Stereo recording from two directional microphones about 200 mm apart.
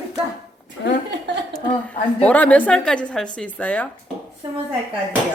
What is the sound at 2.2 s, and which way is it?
Speech, 5° left (ahead or behind).